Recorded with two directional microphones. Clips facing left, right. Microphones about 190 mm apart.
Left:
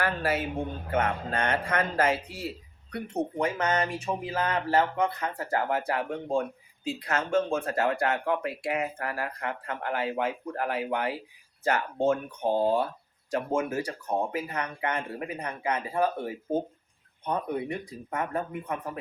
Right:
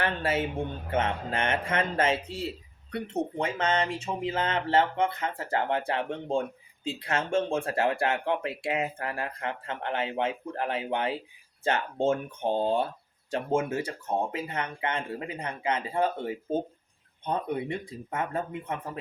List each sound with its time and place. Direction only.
0.0 s speech: 25° right (ahead or behind)